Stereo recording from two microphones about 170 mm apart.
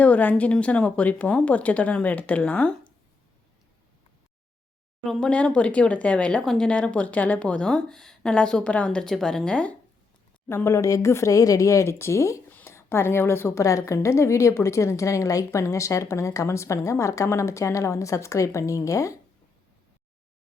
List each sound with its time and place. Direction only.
0.0 s speech: 10° left (ahead or behind)
5.0 s speech: 5° left (ahead or behind)